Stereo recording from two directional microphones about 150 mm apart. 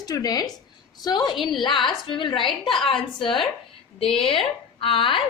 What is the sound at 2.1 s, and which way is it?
Speech, 35° left (ahead or behind).